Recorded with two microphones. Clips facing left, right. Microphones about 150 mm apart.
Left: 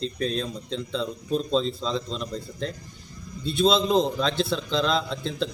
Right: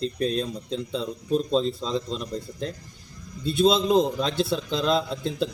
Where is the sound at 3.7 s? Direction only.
10° right (ahead or behind).